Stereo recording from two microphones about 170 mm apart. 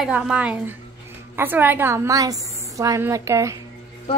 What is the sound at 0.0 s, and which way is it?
A woman's voice, 5° right (ahead or behind).